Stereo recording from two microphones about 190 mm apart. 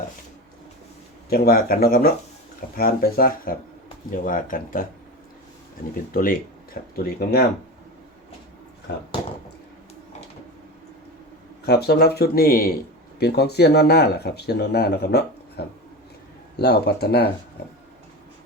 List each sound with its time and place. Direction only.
1.3 s speech: 50° left (ahead or behind)
6.1 s speech: 50° left (ahead or behind)
8.9 s speech: 60° left (ahead or behind)
11.6 s speech: 55° left (ahead or behind)